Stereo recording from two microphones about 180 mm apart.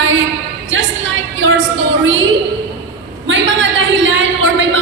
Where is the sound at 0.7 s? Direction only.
90° right.